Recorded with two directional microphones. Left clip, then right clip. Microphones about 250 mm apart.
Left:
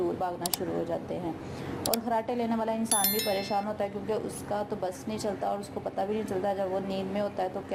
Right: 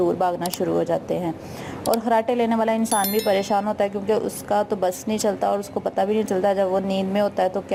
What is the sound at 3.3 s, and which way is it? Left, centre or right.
Speech, right.